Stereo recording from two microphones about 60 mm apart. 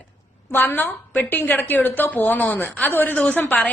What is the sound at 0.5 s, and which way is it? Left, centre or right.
A woman's voice, left.